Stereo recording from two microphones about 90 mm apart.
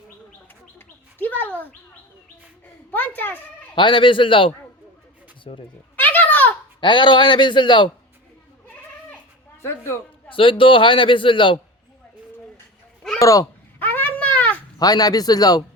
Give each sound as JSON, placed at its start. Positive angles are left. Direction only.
{"t": 0.8, "sound": "bird", "side_deg": 20}
{"t": 2.9, "sound": "speech", "side_deg": 20}
{"t": 3.8, "sound": "a man's voice", "side_deg": 70}
{"t": 5.5, "sound": "speech", "side_deg": 85}
{"t": 6.0, "sound": "a sound", "side_deg": 20}
{"t": 6.7, "sound": "a man's voice", "side_deg": 60}
{"t": 8.6, "sound": "goat", "side_deg": 15}
{"t": 9.6, "sound": "speech", "side_deg": 30}
{"t": 10.2, "sound": "a man's voice", "side_deg": 75}
{"t": 13.1, "sound": "speech", "side_deg": 40}
{"t": 13.7, "sound": "a sound", "side_deg": 20}
{"t": 14.8, "sound": "speech", "side_deg": 45}